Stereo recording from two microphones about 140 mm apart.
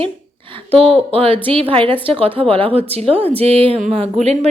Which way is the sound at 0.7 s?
45° right (ahead or behind).